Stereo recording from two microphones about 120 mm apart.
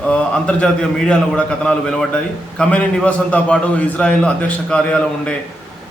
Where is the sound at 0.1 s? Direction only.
10° left (ahead or behind).